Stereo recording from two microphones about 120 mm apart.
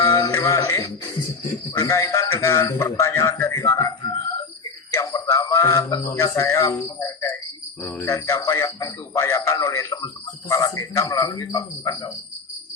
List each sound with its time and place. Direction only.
0.0 s music: 25° left (ahead or behind)
1.7 s a man's voice: 25° left (ahead or behind)